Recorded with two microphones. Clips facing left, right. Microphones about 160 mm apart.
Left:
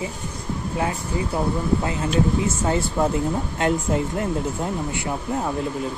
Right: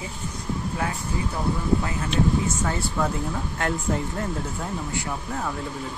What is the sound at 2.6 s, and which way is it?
Speech, 25° left (ahead or behind).